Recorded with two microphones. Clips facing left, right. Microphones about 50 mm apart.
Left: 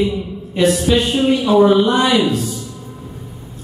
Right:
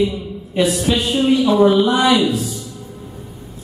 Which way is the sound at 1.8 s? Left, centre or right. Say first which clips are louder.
Even; centre.